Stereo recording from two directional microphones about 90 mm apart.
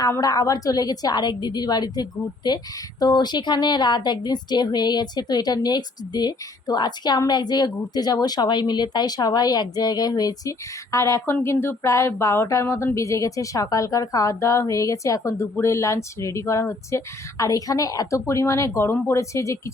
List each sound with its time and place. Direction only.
0.2 s speech: 40° left (ahead or behind)
10.9 s speech: 35° left (ahead or behind)